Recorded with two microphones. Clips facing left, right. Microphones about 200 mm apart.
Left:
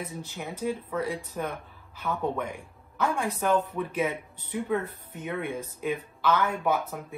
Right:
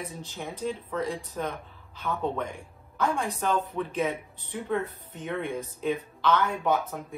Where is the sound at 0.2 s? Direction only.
10° left (ahead or behind).